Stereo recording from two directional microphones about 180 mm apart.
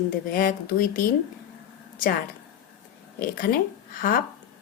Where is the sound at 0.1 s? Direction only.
50° left (ahead or behind).